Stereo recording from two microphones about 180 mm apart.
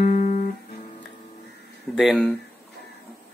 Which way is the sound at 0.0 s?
45° left (ahead or behind).